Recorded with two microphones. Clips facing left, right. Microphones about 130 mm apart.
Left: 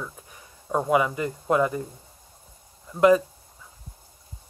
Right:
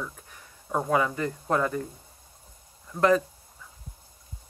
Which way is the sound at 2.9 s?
10° left (ahead or behind).